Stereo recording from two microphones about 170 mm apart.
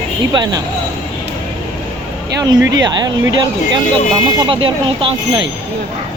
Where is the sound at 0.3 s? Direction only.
25° right (ahead or behind).